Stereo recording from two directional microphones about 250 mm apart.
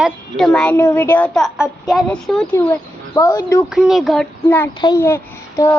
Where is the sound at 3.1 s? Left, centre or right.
Centre.